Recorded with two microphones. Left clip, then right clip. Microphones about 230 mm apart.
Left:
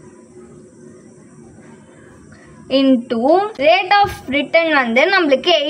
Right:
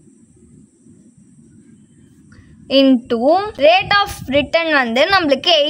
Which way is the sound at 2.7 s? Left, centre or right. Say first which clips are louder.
Right 2 dB; right.